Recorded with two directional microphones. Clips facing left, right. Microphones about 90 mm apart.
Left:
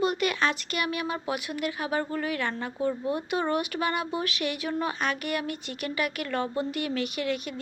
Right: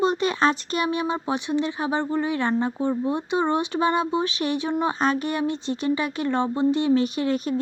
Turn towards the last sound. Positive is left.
turn(degrees=-35)  # may be behind; listen again after turning